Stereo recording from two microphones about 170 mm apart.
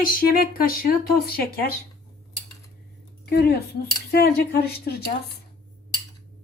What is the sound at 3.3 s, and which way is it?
A woman's voice, 70° left (ahead or behind).